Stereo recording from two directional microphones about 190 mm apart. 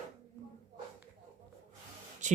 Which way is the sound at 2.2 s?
40° right (ahead or behind).